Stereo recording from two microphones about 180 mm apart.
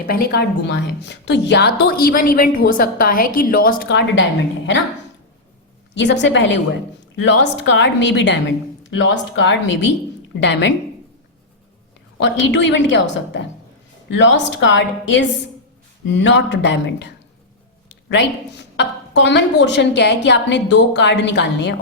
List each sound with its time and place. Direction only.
0.1 s a woman's voice: 65° left (ahead or behind); by 4.8 s 90° left
5.9 s a woman's voice: 80° left
12.2 s a woman's voice: 80° left
18.1 s a woman's voice: 75° left (ahead or behind)